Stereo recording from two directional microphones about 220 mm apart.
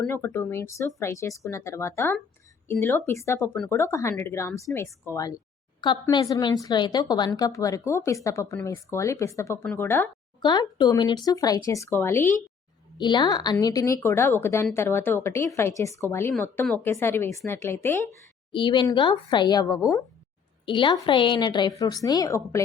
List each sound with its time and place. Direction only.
0.0 s a woman's voice: 10° left (ahead or behind)
18.5 s a woman's voice: 20° left (ahead or behind)